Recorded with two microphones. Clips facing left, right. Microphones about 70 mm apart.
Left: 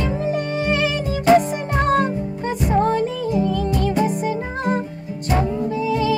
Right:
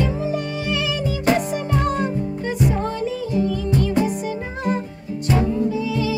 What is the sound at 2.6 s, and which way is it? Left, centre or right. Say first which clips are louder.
Music: left 4 dB; left.